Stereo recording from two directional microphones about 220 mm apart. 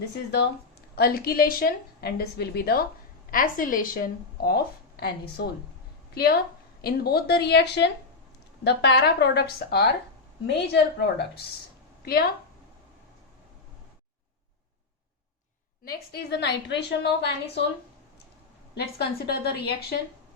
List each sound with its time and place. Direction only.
0.9 s a woman's voice: 45° left (ahead or behind)
15.8 s a woman's voice: 45° left (ahead or behind)
18.7 s a woman's voice: 50° left (ahead or behind)